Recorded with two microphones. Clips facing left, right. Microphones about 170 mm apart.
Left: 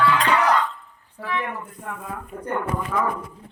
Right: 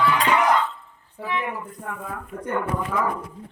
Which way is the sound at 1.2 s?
20° right (ahead or behind).